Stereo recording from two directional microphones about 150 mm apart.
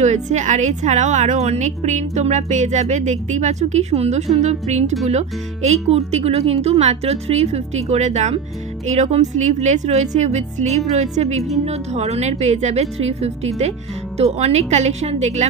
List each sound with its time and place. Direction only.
0.0 s a woman's voice: 50° right (ahead or behind)